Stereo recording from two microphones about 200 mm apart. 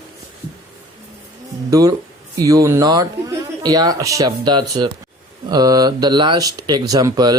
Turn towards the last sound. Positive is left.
turn(degrees=-20)  # may be behind; listen again after turning